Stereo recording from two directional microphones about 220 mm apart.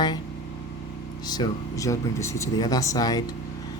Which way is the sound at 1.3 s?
15° left (ahead or behind).